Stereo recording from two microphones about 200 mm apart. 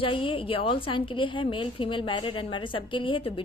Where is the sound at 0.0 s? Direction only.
25° left (ahead or behind).